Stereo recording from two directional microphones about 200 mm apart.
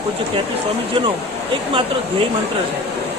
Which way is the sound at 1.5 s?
25° right (ahead or behind).